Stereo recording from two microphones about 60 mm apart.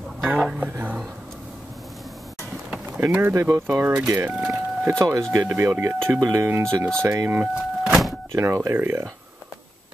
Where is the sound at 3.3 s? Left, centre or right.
Right.